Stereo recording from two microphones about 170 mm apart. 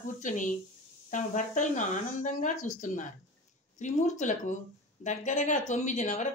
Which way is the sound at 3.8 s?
45° left (ahead or behind).